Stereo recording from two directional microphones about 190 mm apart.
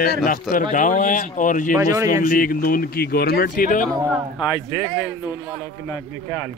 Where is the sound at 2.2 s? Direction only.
50° left (ahead or behind).